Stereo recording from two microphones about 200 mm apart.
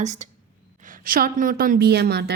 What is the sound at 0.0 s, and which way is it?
A woman's voice, 35° right (ahead or behind).